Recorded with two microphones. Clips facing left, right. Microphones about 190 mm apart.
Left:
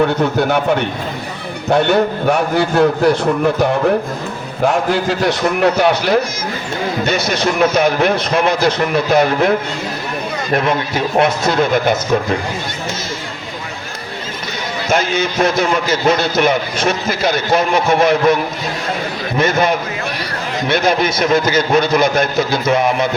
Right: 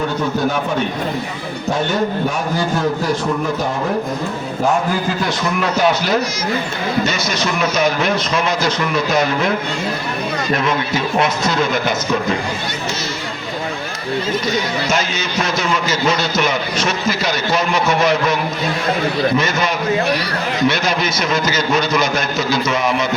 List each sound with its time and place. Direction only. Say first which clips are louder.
1.7 s a man's voice: left 6 dB; 65° left (ahead or behind)
4.6 s a man's voice: left 3 dB; 75° left (ahead or behind); by 9.5 s 55° left (ahead or behind)
10.5 s a man's voice: left 3 dB; 55° left (ahead or behind)
14.8 s a man's voice: left 4 dB; 55° left (ahead or behind)
19.4 s a man's voice: left 4 dB; 55° left (ahead or behind)